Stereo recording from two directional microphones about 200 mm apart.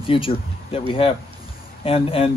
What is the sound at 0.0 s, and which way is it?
Speech, 25° left (ahead or behind).